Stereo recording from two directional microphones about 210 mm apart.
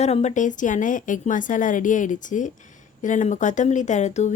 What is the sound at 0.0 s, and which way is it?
Speech, 30° left (ahead or behind).